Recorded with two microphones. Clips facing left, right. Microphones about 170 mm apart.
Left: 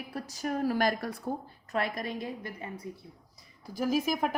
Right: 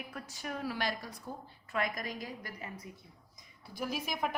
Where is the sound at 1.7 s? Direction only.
35° left (ahead or behind).